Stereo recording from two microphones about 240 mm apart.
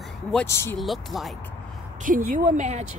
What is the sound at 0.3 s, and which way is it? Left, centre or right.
Speech, centre.